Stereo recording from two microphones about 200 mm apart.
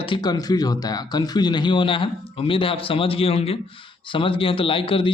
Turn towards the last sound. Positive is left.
turn(degrees=25)  # may be behind; listen again after turning